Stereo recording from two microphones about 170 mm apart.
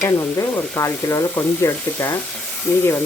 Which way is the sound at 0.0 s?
15° left (ahead or behind).